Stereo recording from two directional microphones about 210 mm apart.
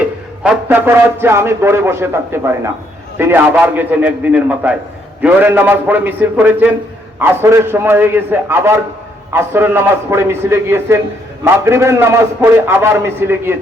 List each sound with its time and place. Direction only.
0.4 s a man's voice: 5° right (ahead or behind)